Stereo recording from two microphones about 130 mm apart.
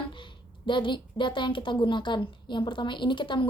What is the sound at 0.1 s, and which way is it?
A woman's voice, 40° left (ahead or behind).